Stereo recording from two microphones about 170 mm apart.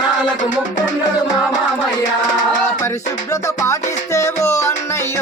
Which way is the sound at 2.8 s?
15° left (ahead or behind).